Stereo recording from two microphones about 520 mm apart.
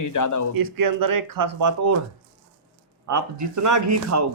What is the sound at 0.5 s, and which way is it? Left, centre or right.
Speech, right.